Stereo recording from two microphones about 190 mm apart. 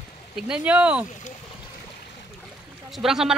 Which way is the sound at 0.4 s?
5° right (ahead or behind).